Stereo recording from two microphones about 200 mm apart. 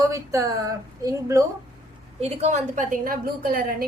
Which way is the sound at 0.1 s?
15° right (ahead or behind).